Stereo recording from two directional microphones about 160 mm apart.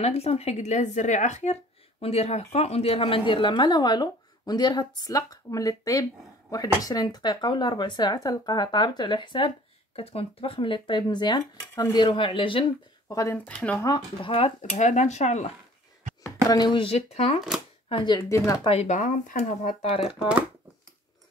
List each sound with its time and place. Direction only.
0.0 s speech: 40° left (ahead or behind)
13.1 s speech: 20° left (ahead or behind)
13.5 s speech: 10° left (ahead or behind)
13.8 s speech: 30° left (ahead or behind)
14.6 s speech: 50° left (ahead or behind)
16.4 s speech: 25° left (ahead or behind)
18.7 s speech: 45° left (ahead or behind)
20.2 s speech: 5° right (ahead or behind)